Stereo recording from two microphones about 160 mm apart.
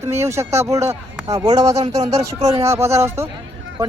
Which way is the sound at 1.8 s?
40° right (ahead or behind).